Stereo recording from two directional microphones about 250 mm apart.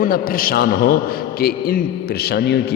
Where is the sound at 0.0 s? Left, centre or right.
Left.